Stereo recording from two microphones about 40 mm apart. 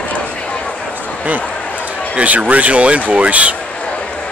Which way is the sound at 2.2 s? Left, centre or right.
Right.